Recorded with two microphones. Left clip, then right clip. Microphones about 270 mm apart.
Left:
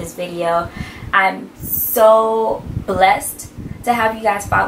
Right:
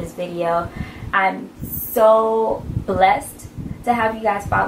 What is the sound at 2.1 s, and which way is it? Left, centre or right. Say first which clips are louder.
Speech: left 2 dB; right.